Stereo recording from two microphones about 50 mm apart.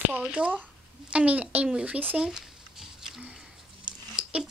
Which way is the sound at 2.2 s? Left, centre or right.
Centre.